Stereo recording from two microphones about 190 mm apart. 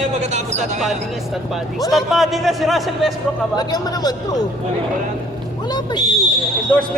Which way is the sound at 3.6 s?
20° left (ahead or behind).